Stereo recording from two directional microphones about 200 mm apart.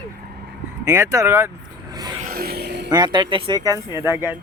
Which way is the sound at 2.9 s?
20° right (ahead or behind).